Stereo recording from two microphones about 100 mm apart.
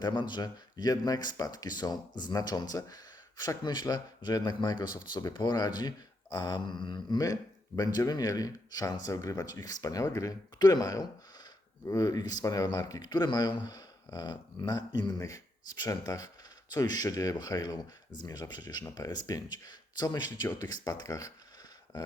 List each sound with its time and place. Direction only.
0.0 s speech: 50° left (ahead or behind)